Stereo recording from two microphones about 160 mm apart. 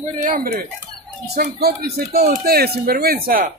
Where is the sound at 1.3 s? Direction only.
85° right; by 3.5 s 65° right (ahead or behind).